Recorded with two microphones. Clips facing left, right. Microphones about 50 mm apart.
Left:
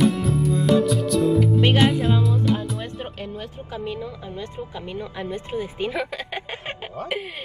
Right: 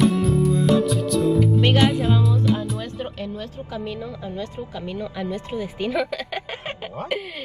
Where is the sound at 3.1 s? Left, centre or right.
Left.